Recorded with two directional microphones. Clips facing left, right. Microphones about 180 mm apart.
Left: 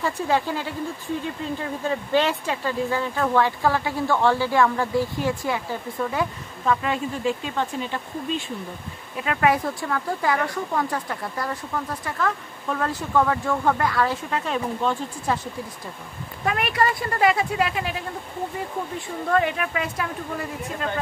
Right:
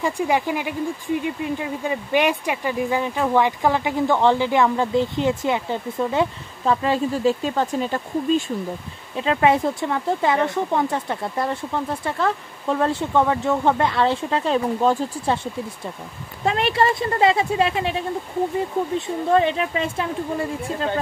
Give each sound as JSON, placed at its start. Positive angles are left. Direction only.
{"t": 0.0, "sound": "speech", "side_deg": -15}
{"t": 9.1, "sound": "speech", "side_deg": -25}